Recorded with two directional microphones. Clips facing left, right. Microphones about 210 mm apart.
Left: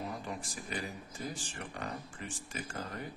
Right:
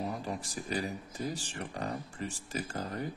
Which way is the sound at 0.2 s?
35° right (ahead or behind).